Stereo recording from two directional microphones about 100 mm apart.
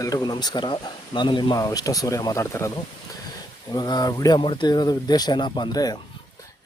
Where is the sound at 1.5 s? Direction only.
40° left (ahead or behind).